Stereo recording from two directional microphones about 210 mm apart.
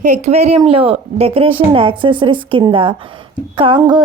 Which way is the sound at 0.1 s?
30° right (ahead or behind).